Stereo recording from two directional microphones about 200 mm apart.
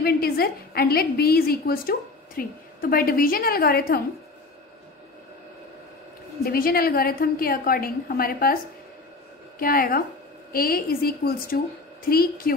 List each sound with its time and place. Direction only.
0.0 s a woman's voice: 50° left (ahead or behind)
6.4 s a woman's voice: 50° left (ahead or behind)
9.6 s a woman's voice: 45° left (ahead or behind)